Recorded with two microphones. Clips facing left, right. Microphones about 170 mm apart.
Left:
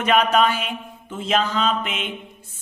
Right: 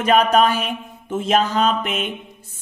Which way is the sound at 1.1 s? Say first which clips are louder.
Right 4 dB; 50° right (ahead or behind).